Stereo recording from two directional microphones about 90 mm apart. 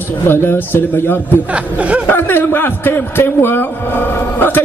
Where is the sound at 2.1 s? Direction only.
25° left (ahead or behind).